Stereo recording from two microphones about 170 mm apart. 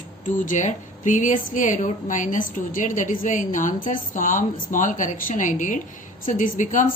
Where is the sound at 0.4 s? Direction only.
45° left (ahead or behind).